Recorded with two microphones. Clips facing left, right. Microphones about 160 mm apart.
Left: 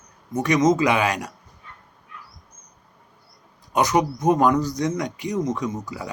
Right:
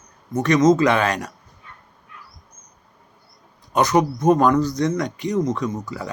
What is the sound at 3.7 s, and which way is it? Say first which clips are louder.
Speech: right 2 dB; 15° left (ahead or behind).